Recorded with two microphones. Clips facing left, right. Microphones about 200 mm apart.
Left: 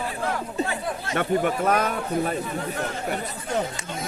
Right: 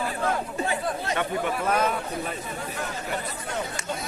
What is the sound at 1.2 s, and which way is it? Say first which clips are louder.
Speech: left 8 dB; 55° left (ahead or behind).